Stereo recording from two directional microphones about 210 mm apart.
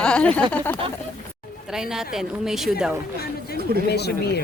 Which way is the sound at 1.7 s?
5° right (ahead or behind).